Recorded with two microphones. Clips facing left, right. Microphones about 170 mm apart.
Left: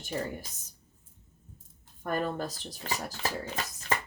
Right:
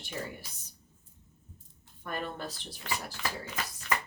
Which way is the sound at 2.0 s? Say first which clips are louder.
Left 6 dB; 40° left (ahead or behind).